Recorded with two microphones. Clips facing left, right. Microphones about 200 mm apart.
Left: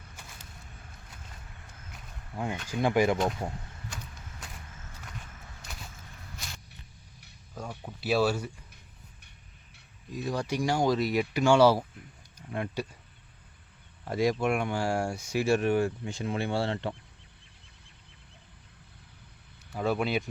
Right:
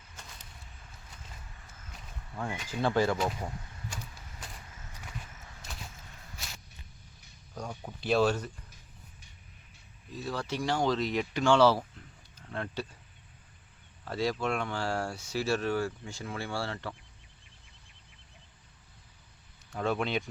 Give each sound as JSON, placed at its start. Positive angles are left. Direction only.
{"t": 2.3, "sound": "speech", "side_deg": 15}
{"t": 3.4, "sound": "speech", "side_deg": 25}
{"t": 6.4, "sound": "walk", "side_deg": -5}
{"t": 7.5, "sound": "speech", "side_deg": 5}
{"t": 10.1, "sound": "speech", "side_deg": 15}
{"t": 14.0, "sound": "speech", "side_deg": 15}
{"t": 19.7, "sound": "speech", "side_deg": 5}